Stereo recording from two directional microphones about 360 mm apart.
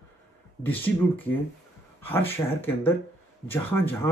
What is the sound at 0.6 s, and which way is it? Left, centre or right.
Speech, centre.